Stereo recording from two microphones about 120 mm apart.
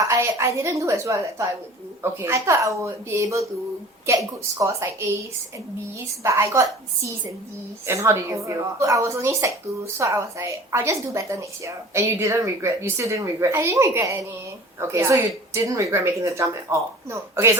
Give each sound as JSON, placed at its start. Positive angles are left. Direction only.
{"t": 0.0, "sound": "speech", "side_deg": -25}
{"t": 6.2, "sound": "speech", "side_deg": -25}